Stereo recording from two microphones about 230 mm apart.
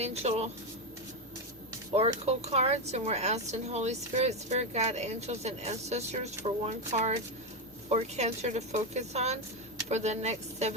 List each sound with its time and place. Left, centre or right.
0.0 s speech: right
2.0 s speech: right